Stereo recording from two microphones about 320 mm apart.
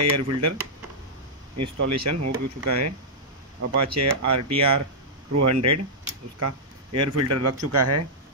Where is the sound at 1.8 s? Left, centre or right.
Right.